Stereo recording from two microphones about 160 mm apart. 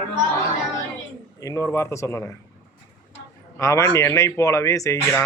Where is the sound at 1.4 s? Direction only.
20° left (ahead or behind).